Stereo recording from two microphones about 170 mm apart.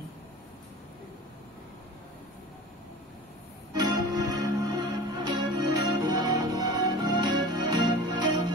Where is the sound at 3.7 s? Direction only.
25° right (ahead or behind).